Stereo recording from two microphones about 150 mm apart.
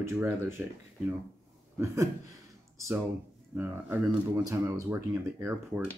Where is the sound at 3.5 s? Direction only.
10° right (ahead or behind).